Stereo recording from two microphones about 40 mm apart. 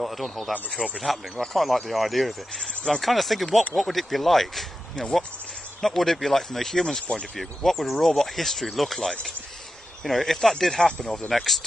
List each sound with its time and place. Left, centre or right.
0.0 s speech: centre
7.3 s speech: centre
10.0 s speech: centre
10.9 s speech: left
11.2 s speech: centre